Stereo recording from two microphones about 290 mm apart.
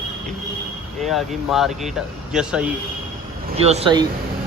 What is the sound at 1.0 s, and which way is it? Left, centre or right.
Speech, centre.